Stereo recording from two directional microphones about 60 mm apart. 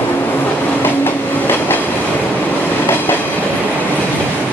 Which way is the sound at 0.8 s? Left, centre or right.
Left.